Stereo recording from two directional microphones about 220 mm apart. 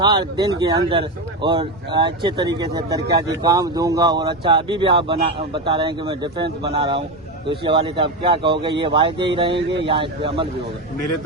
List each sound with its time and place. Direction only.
0.0 s speech: 20° right (ahead or behind)